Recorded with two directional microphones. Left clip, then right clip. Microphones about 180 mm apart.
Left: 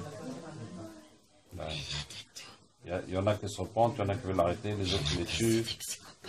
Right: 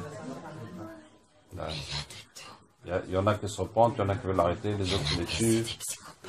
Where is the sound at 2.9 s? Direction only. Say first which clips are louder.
Right 4 dB; 5° right (ahead or behind).